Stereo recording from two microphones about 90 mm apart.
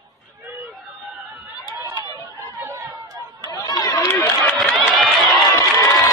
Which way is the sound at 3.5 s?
45° left (ahead or behind).